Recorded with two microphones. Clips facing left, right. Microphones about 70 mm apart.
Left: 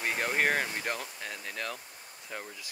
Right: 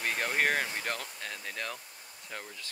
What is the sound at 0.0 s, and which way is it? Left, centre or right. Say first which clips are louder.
Speech: left 1 dB; centre.